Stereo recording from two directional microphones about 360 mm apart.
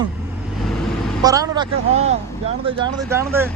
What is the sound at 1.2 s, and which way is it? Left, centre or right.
Speech, centre.